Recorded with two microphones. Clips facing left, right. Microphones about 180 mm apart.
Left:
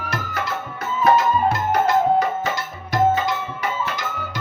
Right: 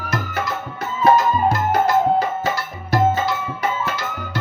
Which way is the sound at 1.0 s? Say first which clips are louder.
Right 1 dB; 35° right (ahead or behind).